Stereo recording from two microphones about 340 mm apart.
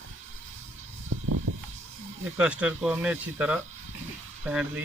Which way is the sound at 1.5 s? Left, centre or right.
Right.